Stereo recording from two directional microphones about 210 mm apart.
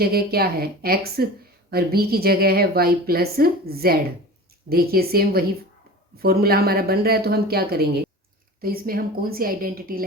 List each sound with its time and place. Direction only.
0.0 s speech: 45° right (ahead or behind)